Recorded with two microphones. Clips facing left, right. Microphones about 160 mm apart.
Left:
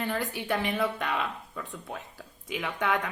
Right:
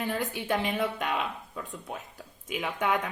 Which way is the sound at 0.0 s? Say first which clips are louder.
Even; 20° right (ahead or behind).